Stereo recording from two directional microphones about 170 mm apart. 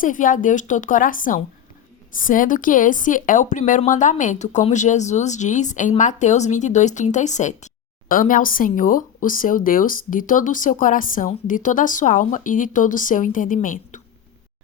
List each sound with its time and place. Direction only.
0.0 s a woman's voice: 50° left (ahead or behind)